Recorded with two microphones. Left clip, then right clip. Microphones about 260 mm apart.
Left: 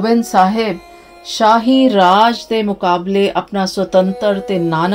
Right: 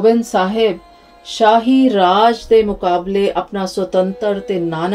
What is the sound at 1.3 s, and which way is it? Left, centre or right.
Speech, left.